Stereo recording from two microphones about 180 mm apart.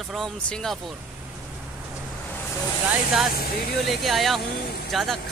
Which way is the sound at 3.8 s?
Centre (ahead or behind).